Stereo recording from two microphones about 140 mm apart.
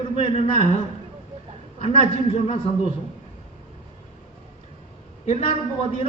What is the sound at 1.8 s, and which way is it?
Speech, 45° left (ahead or behind).